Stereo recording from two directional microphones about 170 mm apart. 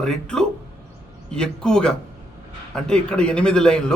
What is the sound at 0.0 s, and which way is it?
Speech, 5° left (ahead or behind).